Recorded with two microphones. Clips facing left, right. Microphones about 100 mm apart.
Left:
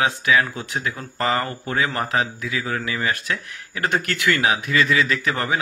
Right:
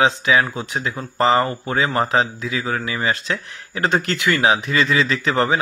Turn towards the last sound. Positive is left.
turn(degrees=-25)  # may be behind; listen again after turning